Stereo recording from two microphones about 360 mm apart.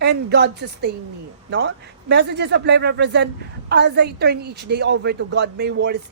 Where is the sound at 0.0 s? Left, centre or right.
Right.